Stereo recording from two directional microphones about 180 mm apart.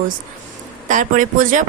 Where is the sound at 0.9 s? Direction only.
45° right (ahead or behind).